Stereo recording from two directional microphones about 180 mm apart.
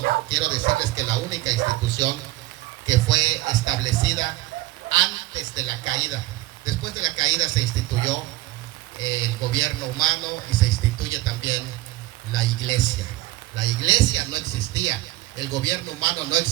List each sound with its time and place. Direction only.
0.3 s speech: 25° right (ahead or behind)
2.8 s speech: 20° right (ahead or behind)